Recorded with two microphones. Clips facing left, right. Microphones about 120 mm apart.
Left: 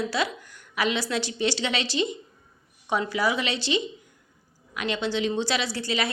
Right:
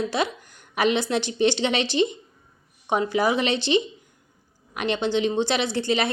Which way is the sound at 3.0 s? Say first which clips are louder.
Right 5 dB; 45° right (ahead or behind).